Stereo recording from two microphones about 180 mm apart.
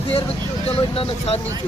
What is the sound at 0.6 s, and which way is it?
Speech, 30° left (ahead or behind).